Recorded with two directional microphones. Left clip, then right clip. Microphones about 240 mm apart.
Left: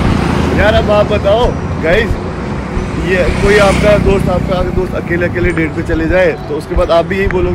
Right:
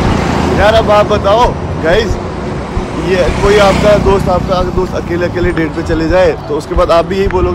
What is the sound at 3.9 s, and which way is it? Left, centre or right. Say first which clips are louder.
Speech: right 2 dB; centre.